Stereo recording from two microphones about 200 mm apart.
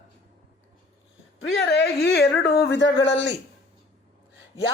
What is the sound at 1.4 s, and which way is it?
Speech, 60° left (ahead or behind).